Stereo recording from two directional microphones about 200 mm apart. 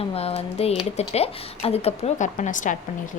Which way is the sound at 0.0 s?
30° left (ahead or behind).